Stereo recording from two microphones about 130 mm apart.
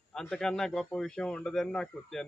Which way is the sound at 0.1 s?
5° left (ahead or behind).